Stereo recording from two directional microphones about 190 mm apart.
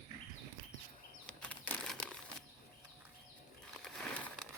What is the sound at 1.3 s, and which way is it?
Crumpling, 5° left (ahead or behind).